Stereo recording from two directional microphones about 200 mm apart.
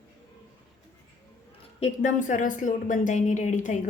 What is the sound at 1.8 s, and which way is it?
Speech, 40° left (ahead or behind).